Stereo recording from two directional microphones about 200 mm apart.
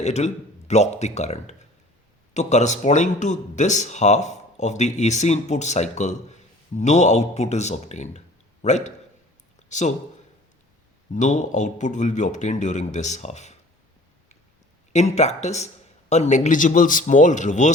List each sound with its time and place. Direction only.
0.0 s speech: 35° left (ahead or behind)
11.1 s speech: 40° left (ahead or behind)
14.9 s speech: 35° left (ahead or behind)